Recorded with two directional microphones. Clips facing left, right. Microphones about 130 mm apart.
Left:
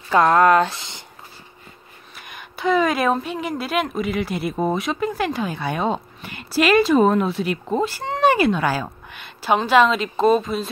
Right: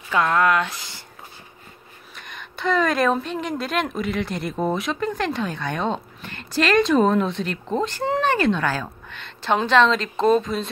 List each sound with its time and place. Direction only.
0.1 s speech: 40° left (ahead or behind)
2.1 s speech: 5° left (ahead or behind)
8.2 s a sound: 10° left (ahead or behind)
9.7 s speech: 10° left (ahead or behind)